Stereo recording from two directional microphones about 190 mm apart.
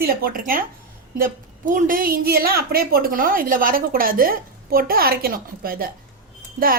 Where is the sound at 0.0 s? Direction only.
50° right (ahead or behind).